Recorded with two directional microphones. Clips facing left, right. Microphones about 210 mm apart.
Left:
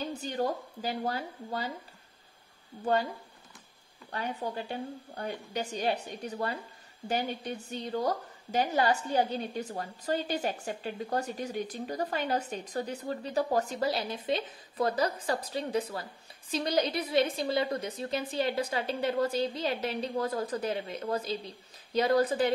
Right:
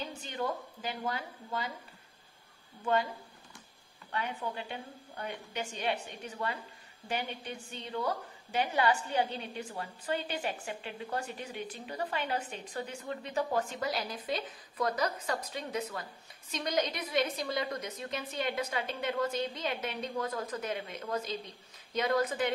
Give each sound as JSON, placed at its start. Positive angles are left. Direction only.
{"t": 0.1, "sound": "a woman's voice", "side_deg": 40}
{"t": 2.8, "sound": "a woman's voice", "side_deg": 35}
{"t": 4.1, "sound": "a woman's voice", "side_deg": 40}